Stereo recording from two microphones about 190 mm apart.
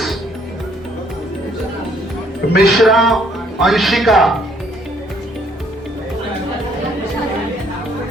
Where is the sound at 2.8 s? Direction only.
Centre (ahead or behind).